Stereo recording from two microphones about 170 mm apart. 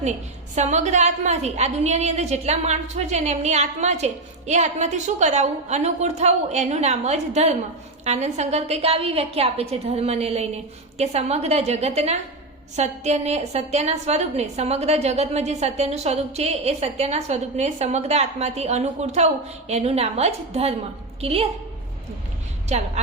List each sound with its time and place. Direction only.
0.5 s a woman's voice: 45° right (ahead or behind)